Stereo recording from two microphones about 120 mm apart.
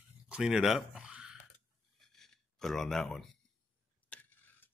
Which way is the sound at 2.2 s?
5° left (ahead or behind).